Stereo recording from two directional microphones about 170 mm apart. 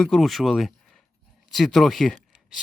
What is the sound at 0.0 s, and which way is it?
Speech, centre (ahead or behind).